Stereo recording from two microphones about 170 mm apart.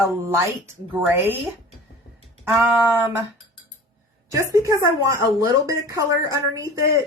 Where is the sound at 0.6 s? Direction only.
10° right (ahead or behind).